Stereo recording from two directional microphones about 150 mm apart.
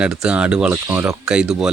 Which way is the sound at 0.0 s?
5° right (ahead or behind).